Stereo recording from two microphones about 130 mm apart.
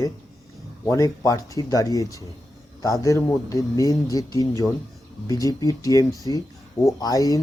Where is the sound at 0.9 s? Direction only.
25° left (ahead or behind).